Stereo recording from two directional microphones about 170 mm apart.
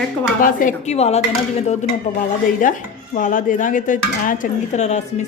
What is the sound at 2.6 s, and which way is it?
Dishes, 50° left (ahead or behind).